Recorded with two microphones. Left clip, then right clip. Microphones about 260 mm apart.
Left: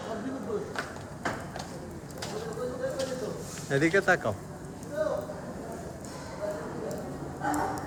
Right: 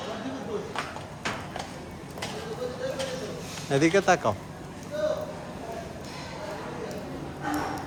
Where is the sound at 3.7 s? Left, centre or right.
Centre.